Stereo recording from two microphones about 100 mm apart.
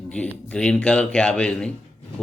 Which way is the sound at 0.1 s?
10° left (ahead or behind).